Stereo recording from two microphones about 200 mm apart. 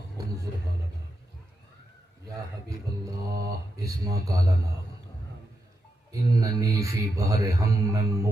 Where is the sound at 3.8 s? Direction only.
15° right (ahead or behind).